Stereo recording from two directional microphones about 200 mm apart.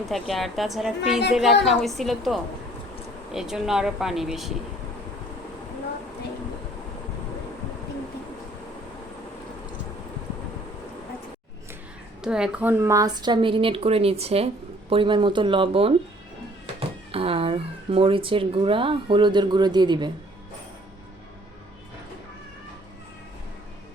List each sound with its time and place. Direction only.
0.0 s a woman's voice: centre (ahead or behind)
12.2 s speech: 5° right (ahead or behind); by 15.9 s 25° right (ahead or behind)
17.1 s speech: 30° right (ahead or behind)